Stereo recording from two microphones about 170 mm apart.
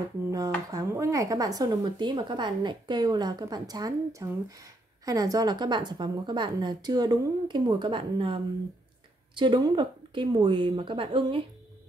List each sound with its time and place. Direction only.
0.3 s speech: 20° right (ahead or behind)